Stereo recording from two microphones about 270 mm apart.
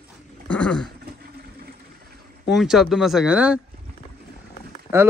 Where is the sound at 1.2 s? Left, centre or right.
Right.